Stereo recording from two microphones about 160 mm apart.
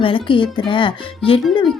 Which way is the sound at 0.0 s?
30° left (ahead or behind).